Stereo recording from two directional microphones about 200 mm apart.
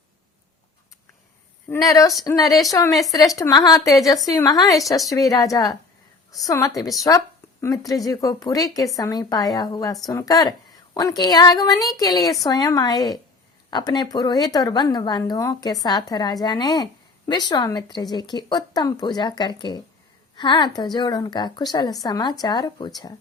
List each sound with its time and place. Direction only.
1.7 s speech: 15° left (ahead or behind)